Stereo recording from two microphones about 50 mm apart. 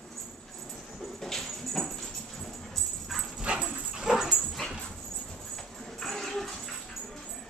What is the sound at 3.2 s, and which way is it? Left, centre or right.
Dog, centre.